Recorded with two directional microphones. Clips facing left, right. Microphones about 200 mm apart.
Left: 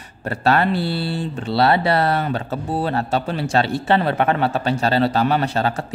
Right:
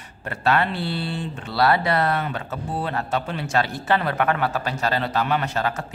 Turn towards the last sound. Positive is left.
turn(degrees=30)  # may be behind; listen again after turning